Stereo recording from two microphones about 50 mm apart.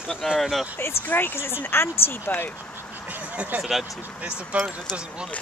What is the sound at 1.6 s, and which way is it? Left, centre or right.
Speech, left.